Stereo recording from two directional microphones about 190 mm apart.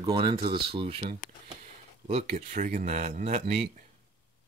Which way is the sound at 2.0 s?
35° right (ahead or behind).